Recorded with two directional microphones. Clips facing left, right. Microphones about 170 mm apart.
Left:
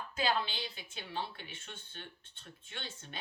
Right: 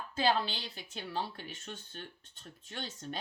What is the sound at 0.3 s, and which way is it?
Speech, 40° right (ahead or behind).